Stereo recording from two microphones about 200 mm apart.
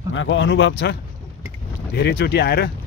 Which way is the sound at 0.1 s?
70° left (ahead or behind).